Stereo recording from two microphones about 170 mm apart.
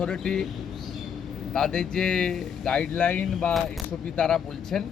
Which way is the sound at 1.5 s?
5° left (ahead or behind).